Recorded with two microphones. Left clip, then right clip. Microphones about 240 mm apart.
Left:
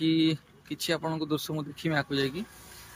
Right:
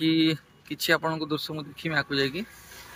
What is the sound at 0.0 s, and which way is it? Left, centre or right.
Speech, centre.